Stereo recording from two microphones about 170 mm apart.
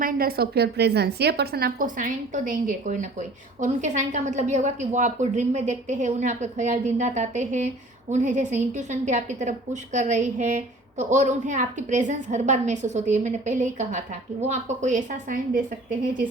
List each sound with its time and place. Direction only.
0.0 s a woman's voice: 60° right (ahead or behind)